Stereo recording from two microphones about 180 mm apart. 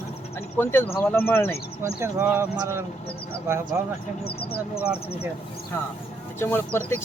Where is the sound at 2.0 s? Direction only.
10° right (ahead or behind).